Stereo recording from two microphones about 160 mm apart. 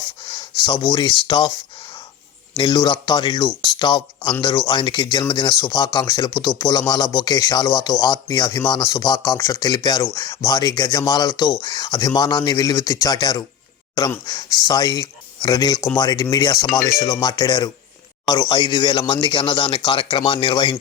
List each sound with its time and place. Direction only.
0.3 s speech: 30° left (ahead or behind)
2.6 s speech: 30° left (ahead or behind)